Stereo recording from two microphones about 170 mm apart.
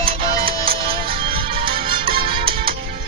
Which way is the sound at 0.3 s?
60° right (ahead or behind).